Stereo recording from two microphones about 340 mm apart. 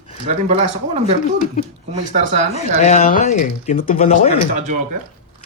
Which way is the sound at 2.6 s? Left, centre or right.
Centre.